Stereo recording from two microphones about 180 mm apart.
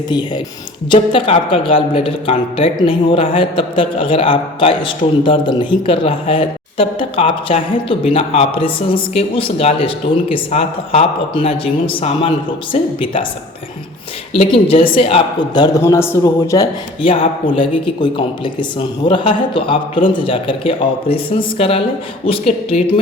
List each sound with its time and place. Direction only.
0.1 s a man's voice: 25° left (ahead or behind)
14.3 s a man's voice: 30° left (ahead or behind); by 16.6 s 15° left (ahead or behind)
17.0 s a man's voice: 30° left (ahead or behind)